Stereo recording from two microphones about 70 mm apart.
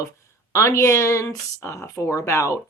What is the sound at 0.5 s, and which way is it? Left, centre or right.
Speech, left.